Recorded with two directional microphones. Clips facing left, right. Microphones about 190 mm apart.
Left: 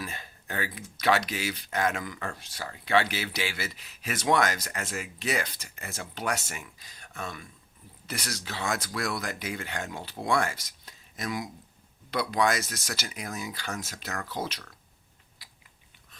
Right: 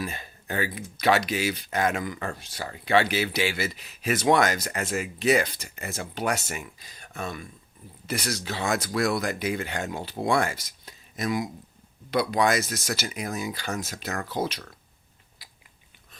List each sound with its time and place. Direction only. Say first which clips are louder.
0.0 s speech: right 5 dB; 15° right (ahead or behind)
8.9 s speech: right 7 dB; 30° right (ahead or behind)
14.3 s speech: right 6 dB; 15° right (ahead or behind)